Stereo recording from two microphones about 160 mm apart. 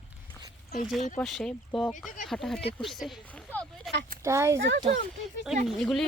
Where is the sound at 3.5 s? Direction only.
5° left (ahead or behind).